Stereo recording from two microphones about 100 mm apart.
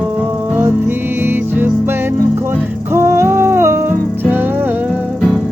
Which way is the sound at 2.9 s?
25° right (ahead or behind).